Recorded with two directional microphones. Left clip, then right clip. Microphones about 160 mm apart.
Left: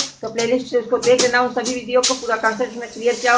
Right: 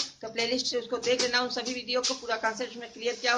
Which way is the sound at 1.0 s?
15° right (ahead or behind).